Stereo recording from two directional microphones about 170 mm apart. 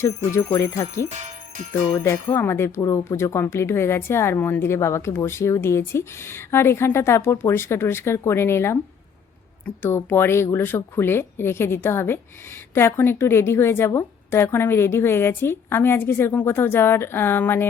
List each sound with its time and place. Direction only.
0.0 s speech: 15° left (ahead or behind)
2.0 s speech: 15° left (ahead or behind)